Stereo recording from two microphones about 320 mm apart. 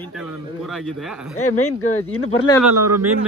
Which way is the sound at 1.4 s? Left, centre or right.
Left.